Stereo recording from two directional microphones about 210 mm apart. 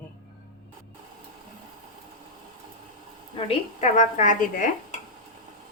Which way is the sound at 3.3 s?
30° left (ahead or behind).